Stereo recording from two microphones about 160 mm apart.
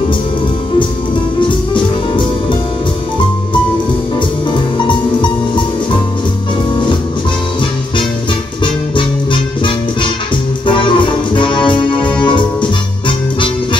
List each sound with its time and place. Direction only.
1.5 s music: 30° left (ahead or behind)
4.7 s music: 30° left (ahead or behind)
10.7 s music: 30° left (ahead or behind)